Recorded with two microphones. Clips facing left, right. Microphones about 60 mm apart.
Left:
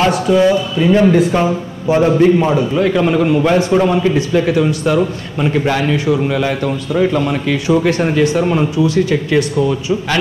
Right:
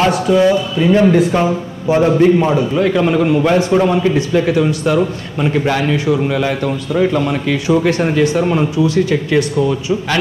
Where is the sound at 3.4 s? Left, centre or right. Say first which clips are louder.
Even; right.